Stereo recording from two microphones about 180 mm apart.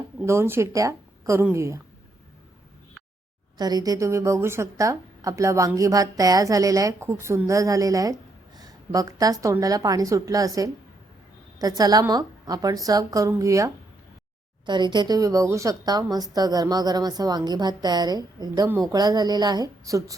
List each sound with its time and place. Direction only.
0.2 s a woman's voice: 15° right (ahead or behind)
3.6 s a woman's voice: 20° right (ahead or behind)
14.7 s a woman's voice: 25° right (ahead or behind)